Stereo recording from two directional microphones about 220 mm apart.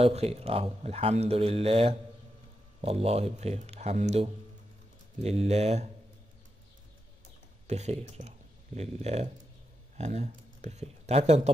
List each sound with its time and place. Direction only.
0.0 s speech: 30° right (ahead or behind)
7.6 s speech: 30° right (ahead or behind)